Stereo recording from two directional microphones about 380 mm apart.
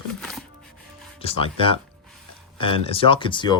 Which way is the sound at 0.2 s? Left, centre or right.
Centre.